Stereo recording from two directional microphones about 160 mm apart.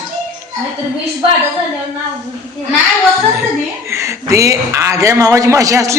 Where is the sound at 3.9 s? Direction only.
20° right (ahead or behind).